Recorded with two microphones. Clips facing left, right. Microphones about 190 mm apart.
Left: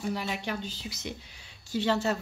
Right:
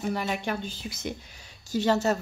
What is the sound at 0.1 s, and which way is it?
A woman's voice, 50° right (ahead or behind).